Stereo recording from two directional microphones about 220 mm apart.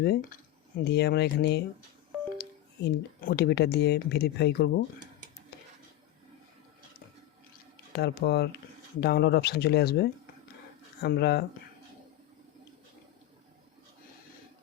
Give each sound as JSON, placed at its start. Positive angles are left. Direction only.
{"t": 0.0, "sound": "speech", "side_deg": 45}
{"t": 7.9, "sound": "speech", "side_deg": 50}